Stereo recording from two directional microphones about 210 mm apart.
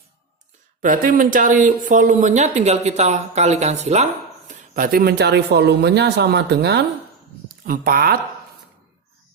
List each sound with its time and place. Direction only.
0.8 s speech: 40° right (ahead or behind)